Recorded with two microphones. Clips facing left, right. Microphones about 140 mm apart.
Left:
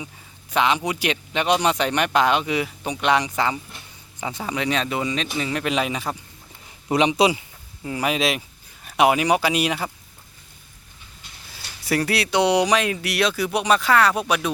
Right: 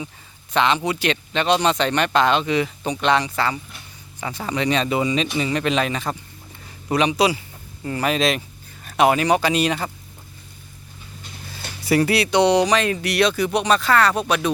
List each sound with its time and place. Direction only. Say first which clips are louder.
0.5 s speech: right 1 dB; 10° left (ahead or behind)
6.9 s speech: even; 20° left (ahead or behind)
7.9 s speech: right 2 dB; 10° left (ahead or behind)
11.9 s speech: right 4 dB; centre (ahead or behind)